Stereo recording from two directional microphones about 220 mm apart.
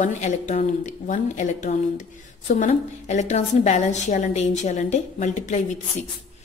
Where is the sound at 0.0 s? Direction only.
35° left (ahead or behind).